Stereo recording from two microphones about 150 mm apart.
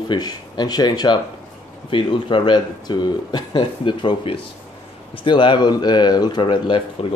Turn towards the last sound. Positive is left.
turn(degrees=30)  # may be behind; listen again after turning